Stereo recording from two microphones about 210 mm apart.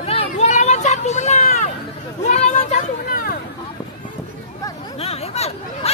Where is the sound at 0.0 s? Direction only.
30° left (ahead or behind).